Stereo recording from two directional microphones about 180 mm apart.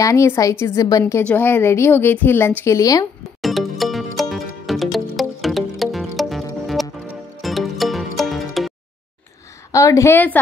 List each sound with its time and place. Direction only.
0.0 s a woman's voice: 15° left (ahead or behind)
3.4 s music: centre (ahead or behind)
9.7 s a woman's voice: 15° left (ahead or behind)